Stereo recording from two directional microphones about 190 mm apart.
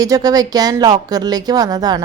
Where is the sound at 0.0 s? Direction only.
20° right (ahead or behind).